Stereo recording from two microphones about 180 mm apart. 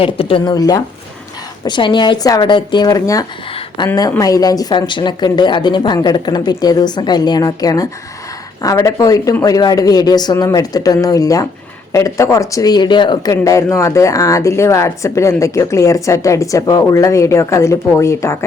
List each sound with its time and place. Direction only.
0.0 s speech: 30° left (ahead or behind); by 18.4 s 15° left (ahead or behind)